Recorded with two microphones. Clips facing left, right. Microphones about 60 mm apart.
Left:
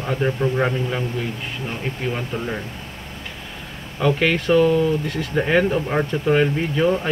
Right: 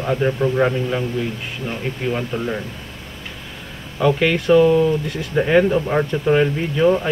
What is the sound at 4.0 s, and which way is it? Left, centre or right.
Speech, centre.